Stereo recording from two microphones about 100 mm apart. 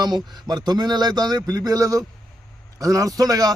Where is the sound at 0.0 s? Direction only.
45° right (ahead or behind).